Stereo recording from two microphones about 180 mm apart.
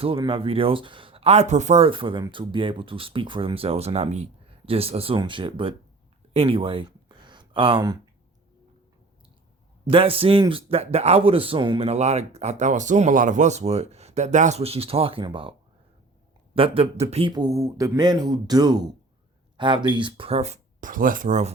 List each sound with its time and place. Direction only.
0.0 s speech: 30° right (ahead or behind)
6.3 s a sound: 30° right (ahead or behind)
9.8 s speech: 30° right (ahead or behind)
16.6 s speech: 30° right (ahead or behind)